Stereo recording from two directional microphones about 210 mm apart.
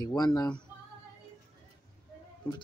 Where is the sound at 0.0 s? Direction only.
20° left (ahead or behind).